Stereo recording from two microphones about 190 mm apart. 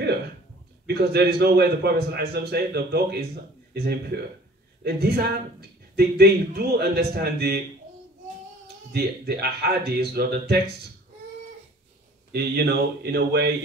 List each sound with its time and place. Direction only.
0.8 s speech: 60° right (ahead or behind)
8.6 s speech: 55° right (ahead or behind)
12.3 s speech: 55° right (ahead or behind)